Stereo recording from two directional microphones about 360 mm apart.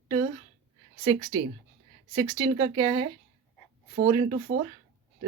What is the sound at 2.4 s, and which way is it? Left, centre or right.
Speech, centre.